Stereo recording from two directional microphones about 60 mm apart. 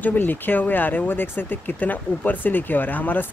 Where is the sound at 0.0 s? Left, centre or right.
Left.